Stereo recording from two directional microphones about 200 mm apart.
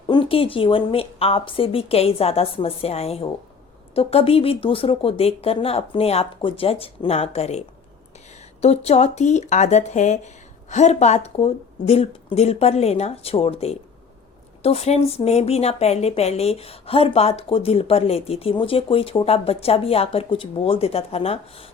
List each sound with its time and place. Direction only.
0.1 s speech: 25° left (ahead or behind)
8.6 s speech: 30° left (ahead or behind)